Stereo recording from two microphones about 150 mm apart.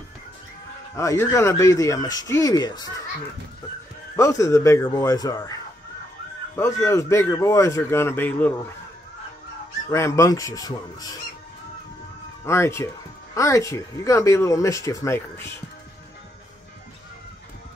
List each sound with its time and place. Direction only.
0.9 s speech: 20° left (ahead or behind)
4.2 s a man's voice: 20° left (ahead or behind)
9.8 s speech: 20° left (ahead or behind)
12.4 s speech: 20° left (ahead or behind)